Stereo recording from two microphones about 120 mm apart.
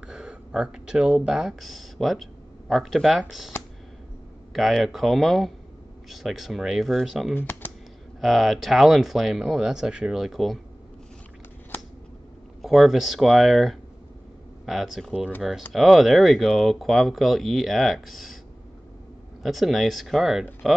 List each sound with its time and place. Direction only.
0.0 s speech: 5° right (ahead or behind)
7.3 s speech: 15° left (ahead or behind)
8.2 s speech: centre (ahead or behind)
12.6 s speech: 5° right (ahead or behind)
19.4 s speech: centre (ahead or behind)